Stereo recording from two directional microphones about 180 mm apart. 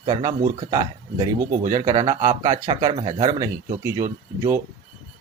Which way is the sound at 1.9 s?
20° right (ahead or behind).